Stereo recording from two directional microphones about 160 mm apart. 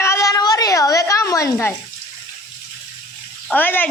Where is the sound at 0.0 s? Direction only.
20° left (ahead or behind).